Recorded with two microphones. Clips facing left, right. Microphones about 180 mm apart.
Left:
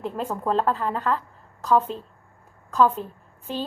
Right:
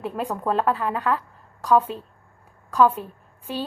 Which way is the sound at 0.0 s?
10° right (ahead or behind).